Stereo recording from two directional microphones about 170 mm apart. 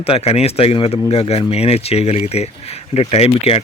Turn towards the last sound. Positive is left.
turn(degrees=40)  # may be behind; listen again after turning